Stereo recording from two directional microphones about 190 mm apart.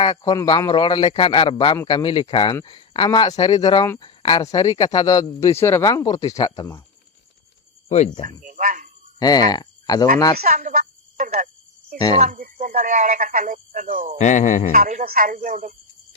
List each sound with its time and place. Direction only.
0.0 s speech: 25° left (ahead or behind)
7.9 s speech: 35° left (ahead or behind)
8.4 s cricket: 45° right (ahead or behind)
9.1 s speech: 20° left (ahead or behind)
10.4 s speech: 45° right (ahead or behind)
11.9 s speech: 20° left (ahead or behind)
12.2 s speech: 45° right (ahead or behind)
14.2 s speech: 40° left (ahead or behind)
14.8 s speech: 40° right (ahead or behind)